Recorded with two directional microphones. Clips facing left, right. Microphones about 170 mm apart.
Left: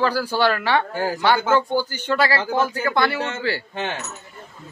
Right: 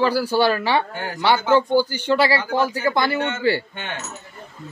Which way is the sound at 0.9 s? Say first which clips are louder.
Left 6 dB; 30° left (ahead or behind).